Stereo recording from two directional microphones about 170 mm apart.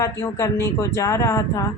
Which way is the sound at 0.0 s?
20° left (ahead or behind).